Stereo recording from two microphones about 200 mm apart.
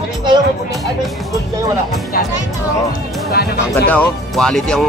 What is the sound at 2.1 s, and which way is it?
Speech, 45° left (ahead or behind).